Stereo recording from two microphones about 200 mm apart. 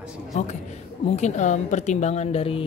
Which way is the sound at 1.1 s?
35° left (ahead or behind).